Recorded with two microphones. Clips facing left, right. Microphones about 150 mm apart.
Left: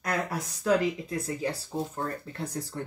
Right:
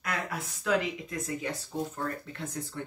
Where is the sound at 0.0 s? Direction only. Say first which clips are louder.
Left 4 dB; 35° left (ahead or behind).